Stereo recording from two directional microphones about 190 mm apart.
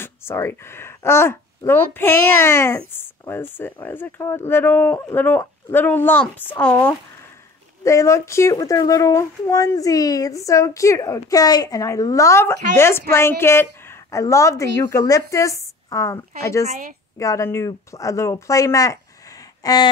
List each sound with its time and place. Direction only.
0.0 s a child's voice: 15° left (ahead or behind)